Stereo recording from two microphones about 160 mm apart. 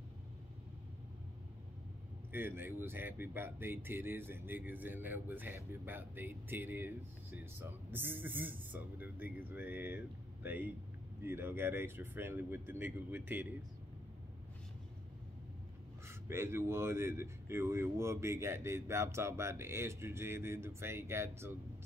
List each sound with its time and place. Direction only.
2.3 s speech: 15° right (ahead or behind)
7.9 s speech: 15° right (ahead or behind)
16.1 s speech: 15° right (ahead or behind)